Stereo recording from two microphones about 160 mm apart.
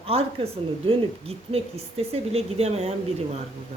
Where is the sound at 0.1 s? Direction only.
40° right (ahead or behind).